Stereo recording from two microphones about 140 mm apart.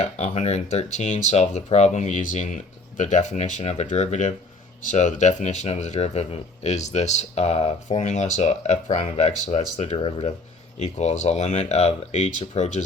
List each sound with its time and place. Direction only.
0.0 s speech: 55° left (ahead or behind)
10.8 s speech: 55° left (ahead or behind)